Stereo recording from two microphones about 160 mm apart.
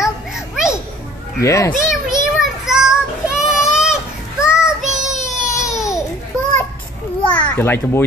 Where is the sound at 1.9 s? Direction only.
5° right (ahead or behind).